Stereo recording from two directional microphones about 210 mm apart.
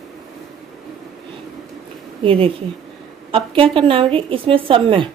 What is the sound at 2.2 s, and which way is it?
A woman's voice, 25° right (ahead or behind).